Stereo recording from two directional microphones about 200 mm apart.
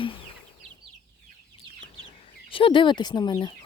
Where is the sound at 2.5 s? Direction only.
25° left (ahead or behind).